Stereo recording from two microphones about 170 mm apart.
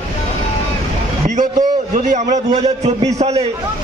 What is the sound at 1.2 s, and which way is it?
A man's voice, 45° right (ahead or behind).